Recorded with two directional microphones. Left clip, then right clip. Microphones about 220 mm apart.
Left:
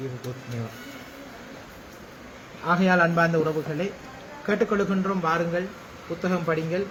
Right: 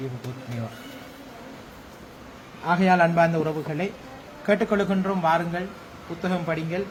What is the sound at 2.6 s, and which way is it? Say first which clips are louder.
A man's voice: right 1 dB; 15° right (ahead or behind).